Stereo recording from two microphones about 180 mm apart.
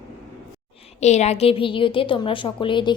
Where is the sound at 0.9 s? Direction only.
40° left (ahead or behind).